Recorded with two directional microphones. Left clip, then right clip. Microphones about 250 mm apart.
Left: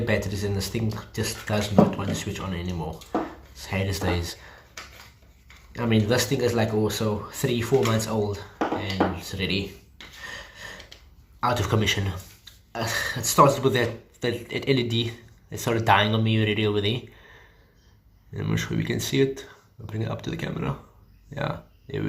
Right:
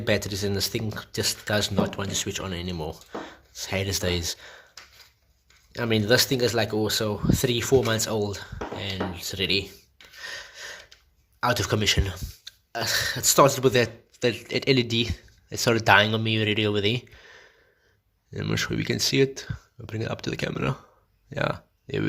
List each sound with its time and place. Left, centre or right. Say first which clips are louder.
0.0 s speech: right 1 dB; right
5.7 s speech: right 2 dB; right
10.2 s a sound: right 2 dB; right
11.3 s speech: even; right